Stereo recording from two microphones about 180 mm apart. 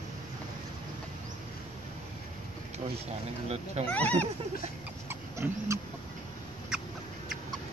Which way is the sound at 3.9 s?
10° left (ahead or behind).